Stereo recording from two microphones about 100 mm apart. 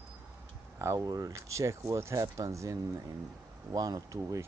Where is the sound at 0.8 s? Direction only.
30° right (ahead or behind).